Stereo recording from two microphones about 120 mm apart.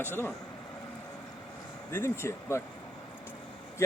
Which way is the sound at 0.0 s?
15° left (ahead or behind).